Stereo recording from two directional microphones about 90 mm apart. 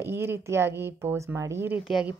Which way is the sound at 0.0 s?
25° right (ahead or behind).